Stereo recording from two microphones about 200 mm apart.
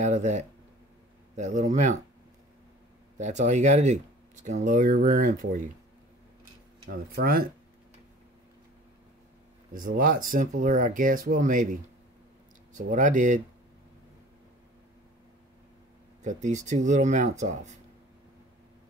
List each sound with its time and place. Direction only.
0.0 s speech: 35° right (ahead or behind)
3.2 s speech: 35° right (ahead or behind)
6.9 s speech: 50° right (ahead or behind)
9.8 s speech: 45° right (ahead or behind)
16.2 s speech: 35° right (ahead or behind)